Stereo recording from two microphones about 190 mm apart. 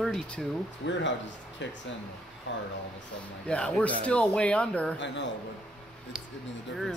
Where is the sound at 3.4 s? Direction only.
5° left (ahead or behind).